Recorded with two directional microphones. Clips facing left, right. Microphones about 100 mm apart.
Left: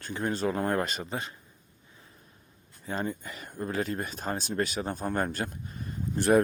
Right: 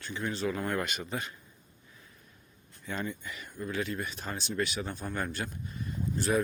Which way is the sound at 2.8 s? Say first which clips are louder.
Left 3 dB; 35° left (ahead or behind).